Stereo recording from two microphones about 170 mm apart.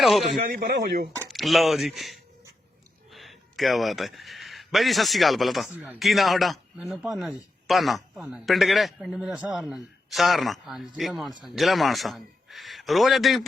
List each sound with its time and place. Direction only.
0.0 s a man's voice: centre (ahead or behind)
0.4 s a man's voice: 55° right (ahead or behind)
1.3 s a man's voice: centre (ahead or behind)